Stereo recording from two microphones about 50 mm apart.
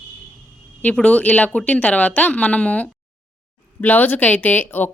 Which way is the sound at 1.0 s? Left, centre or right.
Left.